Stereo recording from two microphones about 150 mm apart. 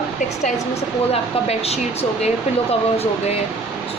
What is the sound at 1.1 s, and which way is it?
Speech, 45° left (ahead or behind).